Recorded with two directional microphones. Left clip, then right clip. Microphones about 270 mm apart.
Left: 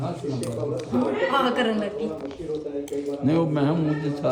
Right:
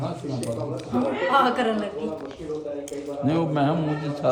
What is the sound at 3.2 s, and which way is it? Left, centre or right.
Speech, centre.